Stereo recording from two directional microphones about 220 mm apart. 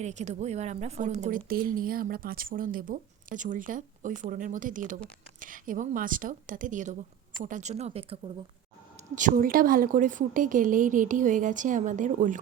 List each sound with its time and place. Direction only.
0.0 s speech: 30° right (ahead or behind)
9.1 s speech: 40° right (ahead or behind)